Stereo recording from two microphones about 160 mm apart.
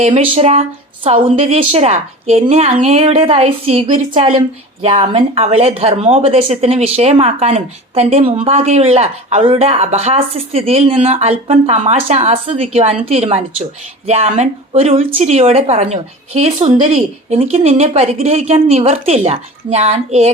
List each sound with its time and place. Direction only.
0.0 s speech: 40° right (ahead or behind)
4.3 s speech: 40° right (ahead or behind)
16.6 s a woman's voice: 30° right (ahead or behind)
16.8 s speech: 40° right (ahead or behind)